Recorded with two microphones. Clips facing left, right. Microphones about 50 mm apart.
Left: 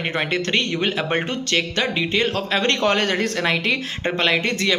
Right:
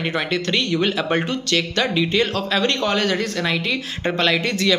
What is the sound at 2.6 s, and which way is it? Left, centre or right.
Speech, left.